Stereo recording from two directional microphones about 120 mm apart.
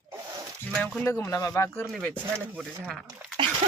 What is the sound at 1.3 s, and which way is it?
Speech, 30° left (ahead or behind).